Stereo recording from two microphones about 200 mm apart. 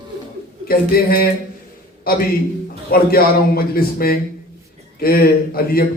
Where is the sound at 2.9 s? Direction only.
50° left (ahead or behind).